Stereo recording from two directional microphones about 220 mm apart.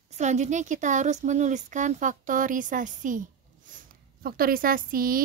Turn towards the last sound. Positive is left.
turn(degrees=-40)  # may be behind; listen again after turning